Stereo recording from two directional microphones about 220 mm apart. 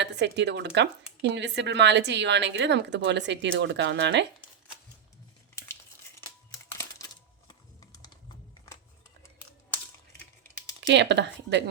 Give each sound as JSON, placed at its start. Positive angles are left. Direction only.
{"t": 0.0, "sound": "speech", "side_deg": -50}
{"t": 7.0, "sound": "coin", "side_deg": 15}
{"t": 7.4, "sound": "a sound", "side_deg": 15}
{"t": 10.8, "sound": "speech", "side_deg": -55}